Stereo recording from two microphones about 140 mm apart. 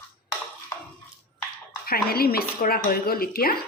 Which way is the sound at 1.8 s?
90° left.